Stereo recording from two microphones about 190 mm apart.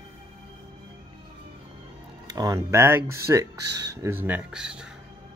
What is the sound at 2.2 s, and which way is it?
Speech, 20° right (ahead or behind).